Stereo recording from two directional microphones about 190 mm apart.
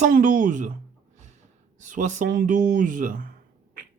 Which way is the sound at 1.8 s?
40° right (ahead or behind).